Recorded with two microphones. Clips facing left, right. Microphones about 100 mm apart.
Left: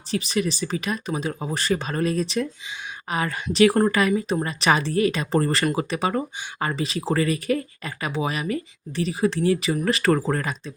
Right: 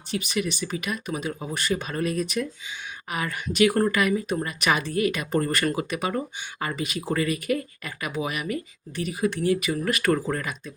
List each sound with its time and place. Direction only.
0.1 s speech: 35° left (ahead or behind)